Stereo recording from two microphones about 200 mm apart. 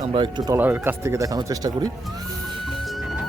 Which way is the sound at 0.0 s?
20° right (ahead or behind).